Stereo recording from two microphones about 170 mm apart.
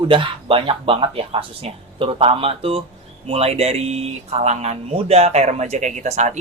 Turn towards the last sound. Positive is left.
turn(degrees=-40)  # may be behind; listen again after turning